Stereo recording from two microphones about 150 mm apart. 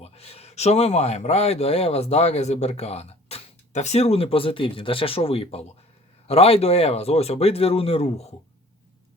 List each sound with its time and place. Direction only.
0.0 s speech: 45° left (ahead or behind)